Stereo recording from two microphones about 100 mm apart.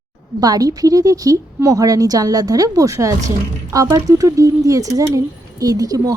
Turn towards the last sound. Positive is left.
turn(degrees=-35)  # may be behind; listen again after turning